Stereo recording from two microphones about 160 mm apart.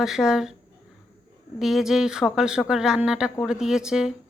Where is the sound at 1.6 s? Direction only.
Centre (ahead or behind).